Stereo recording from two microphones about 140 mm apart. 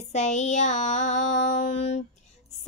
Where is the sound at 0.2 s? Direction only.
55° left (ahead or behind).